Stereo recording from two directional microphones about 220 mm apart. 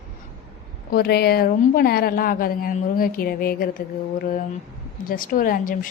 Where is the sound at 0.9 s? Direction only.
45° left (ahead or behind).